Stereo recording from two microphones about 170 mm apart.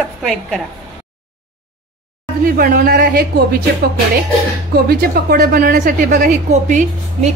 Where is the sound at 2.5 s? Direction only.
60° right (ahead or behind).